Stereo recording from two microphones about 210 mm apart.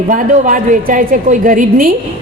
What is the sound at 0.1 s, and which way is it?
A man's voice, 40° right (ahead or behind).